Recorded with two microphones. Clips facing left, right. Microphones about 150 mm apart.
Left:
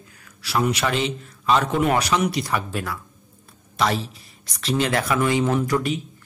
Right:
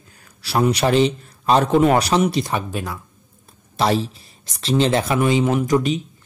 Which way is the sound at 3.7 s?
30° right (ahead or behind).